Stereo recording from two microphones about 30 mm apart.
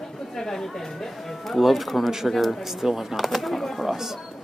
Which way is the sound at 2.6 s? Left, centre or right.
Centre.